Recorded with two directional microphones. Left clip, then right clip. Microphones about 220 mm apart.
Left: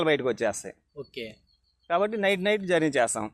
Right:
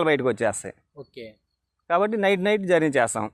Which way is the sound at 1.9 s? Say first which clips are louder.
Right 4 dB; 40° right (ahead or behind).